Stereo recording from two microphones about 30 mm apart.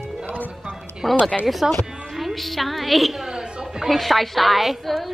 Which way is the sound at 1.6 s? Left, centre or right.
Centre.